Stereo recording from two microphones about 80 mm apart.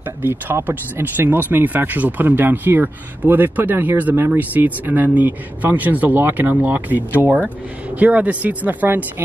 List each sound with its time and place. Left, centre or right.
0.2 s speech: right